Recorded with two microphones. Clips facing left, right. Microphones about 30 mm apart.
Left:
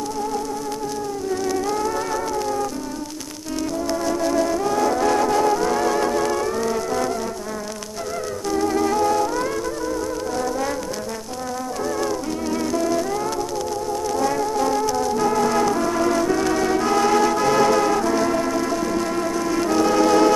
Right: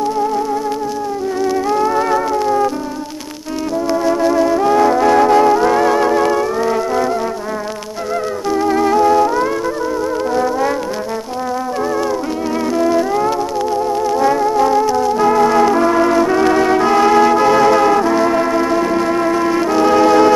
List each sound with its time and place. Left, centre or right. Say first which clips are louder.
1.4 s music: right 8 dB; right
3.9 s music: right 7 dB; right
8.5 s music: right 6 dB; right
10.3 s theremin: right 8 dB; right
12.7 s music: right 9 dB; right